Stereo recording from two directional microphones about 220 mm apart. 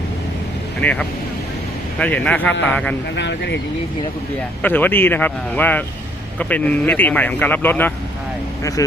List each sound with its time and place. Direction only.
0.8 s speech: 5° left (ahead or behind)
3.2 s speech: 50° left (ahead or behind)
4.6 s speech: 10° left (ahead or behind)